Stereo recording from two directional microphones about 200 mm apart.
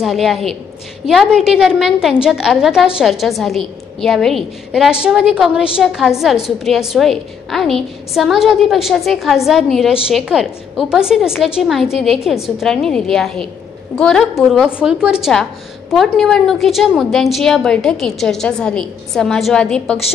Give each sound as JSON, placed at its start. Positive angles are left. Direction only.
{"t": 0.0, "sound": "a woman's voice", "side_deg": 0}